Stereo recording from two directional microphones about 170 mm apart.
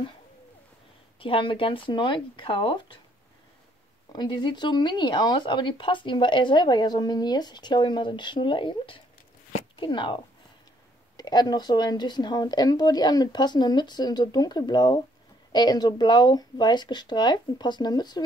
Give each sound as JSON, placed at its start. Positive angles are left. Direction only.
{"t": 1.2, "sound": "speech", "side_deg": 30}
{"t": 4.1, "sound": "speech", "side_deg": 25}